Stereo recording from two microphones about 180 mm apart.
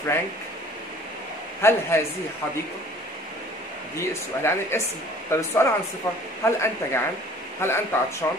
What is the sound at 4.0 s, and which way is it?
Speech, 15° left (ahead or behind).